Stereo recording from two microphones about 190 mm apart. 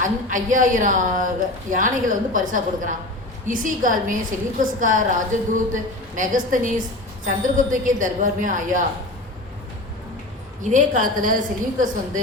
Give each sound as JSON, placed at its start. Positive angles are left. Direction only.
{"t": 0.0, "sound": "a woman's voice", "side_deg": -45}
{"t": 10.6, "sound": "a woman's voice", "side_deg": -40}